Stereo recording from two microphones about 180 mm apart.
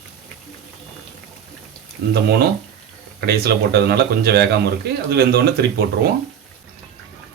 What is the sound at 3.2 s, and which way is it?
Speech, 60° right (ahead or behind).